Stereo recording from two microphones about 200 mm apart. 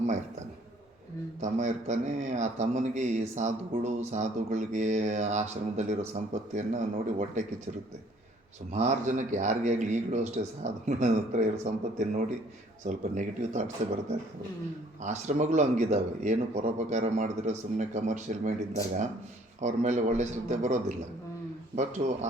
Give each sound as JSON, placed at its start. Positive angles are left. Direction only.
{"t": 1.4, "sound": "a man's voice", "side_deg": -35}
{"t": 8.7, "sound": "a man's voice", "side_deg": -35}
{"t": 15.0, "sound": "a man's voice", "side_deg": -35}